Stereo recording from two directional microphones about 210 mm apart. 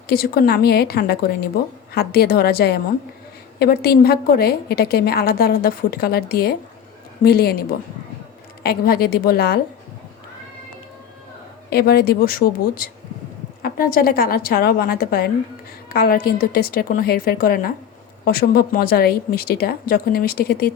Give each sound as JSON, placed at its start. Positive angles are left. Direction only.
{"t": 0.1, "sound": "a woman's voice", "side_deg": 45}
{"t": 8.6, "sound": "a woman's voice", "side_deg": 45}
{"t": 11.7, "sound": "a woman's voice", "side_deg": 50}